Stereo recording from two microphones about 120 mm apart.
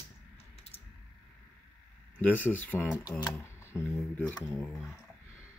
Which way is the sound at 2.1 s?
15° left (ahead or behind).